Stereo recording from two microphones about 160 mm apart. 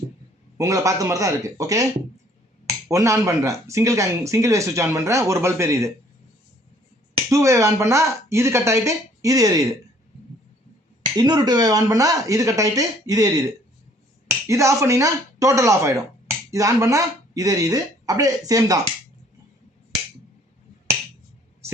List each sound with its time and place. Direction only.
0.5 s speech: 20° right (ahead or behind)
7.3 s speech: 20° right (ahead or behind)
11.2 s speech: 25° right (ahead or behind)